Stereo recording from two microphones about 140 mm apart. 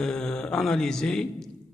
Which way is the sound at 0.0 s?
5° left (ahead or behind).